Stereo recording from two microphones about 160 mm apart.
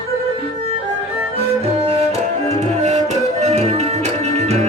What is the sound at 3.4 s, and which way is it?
Music, 45° right (ahead or behind).